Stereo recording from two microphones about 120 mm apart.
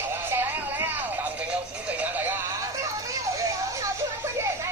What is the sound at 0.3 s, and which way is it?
Music, 15° right (ahead or behind).